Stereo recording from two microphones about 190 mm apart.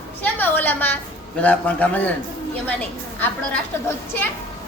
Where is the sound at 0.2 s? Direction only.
10° left (ahead or behind).